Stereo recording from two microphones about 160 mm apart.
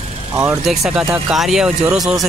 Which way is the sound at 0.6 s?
Centre (ahead or behind).